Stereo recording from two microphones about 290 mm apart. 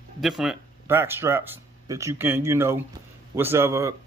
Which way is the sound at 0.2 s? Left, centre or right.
Centre.